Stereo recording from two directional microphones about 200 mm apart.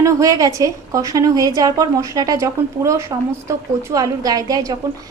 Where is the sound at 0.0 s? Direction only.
15° right (ahead or behind).